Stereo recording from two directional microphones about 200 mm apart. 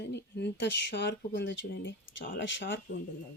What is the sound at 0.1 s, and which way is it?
Speech, 60° left (ahead or behind).